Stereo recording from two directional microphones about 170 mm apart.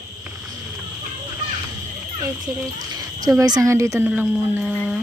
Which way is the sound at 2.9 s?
20° right (ahead or behind).